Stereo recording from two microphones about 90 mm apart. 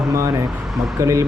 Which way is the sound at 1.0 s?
35° right (ahead or behind).